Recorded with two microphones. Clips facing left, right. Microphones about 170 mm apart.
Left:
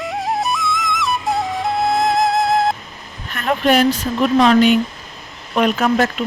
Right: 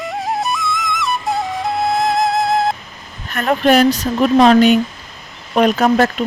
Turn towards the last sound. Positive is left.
turn(degrees=-40)  # may be behind; listen again after turning